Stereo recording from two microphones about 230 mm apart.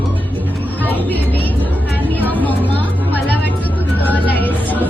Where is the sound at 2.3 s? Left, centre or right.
Centre.